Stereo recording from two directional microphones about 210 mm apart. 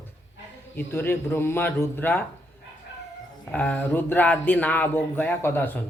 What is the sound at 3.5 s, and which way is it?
A man's voice, 5° left (ahead or behind).